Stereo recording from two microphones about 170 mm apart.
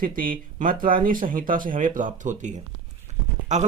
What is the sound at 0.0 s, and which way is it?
Speech, 55° right (ahead or behind).